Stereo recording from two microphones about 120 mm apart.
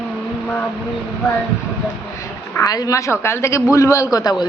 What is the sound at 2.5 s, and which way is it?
A man's voice, 30° left (ahead or behind).